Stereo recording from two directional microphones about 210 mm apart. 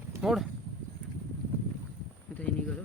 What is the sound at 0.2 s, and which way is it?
Speech, 5° right (ahead or behind).